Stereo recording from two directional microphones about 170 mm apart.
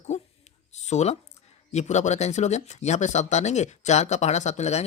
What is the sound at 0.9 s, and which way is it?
Speech, 40° left (ahead or behind).